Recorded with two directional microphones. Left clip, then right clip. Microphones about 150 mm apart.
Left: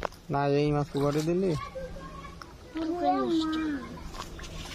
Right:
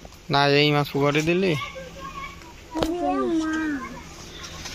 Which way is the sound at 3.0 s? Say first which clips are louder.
Even; 45° right (ahead or behind).